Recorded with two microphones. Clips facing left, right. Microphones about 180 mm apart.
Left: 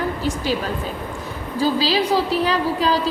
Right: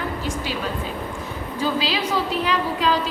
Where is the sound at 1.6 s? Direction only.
35° left (ahead or behind).